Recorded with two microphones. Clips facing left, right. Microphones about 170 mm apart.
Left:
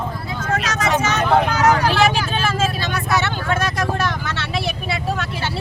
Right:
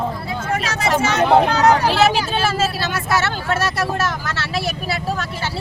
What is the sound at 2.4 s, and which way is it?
Speech, 5° right (ahead or behind).